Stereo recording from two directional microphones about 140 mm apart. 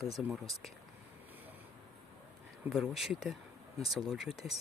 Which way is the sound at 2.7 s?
Centre (ahead or behind).